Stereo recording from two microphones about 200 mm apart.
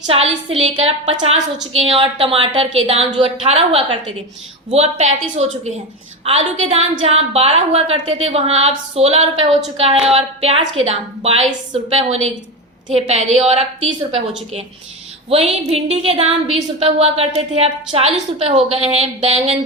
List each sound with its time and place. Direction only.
0.1 s a woman's voice: 30° right (ahead or behind)
15.3 s a woman's voice: 30° right (ahead or behind)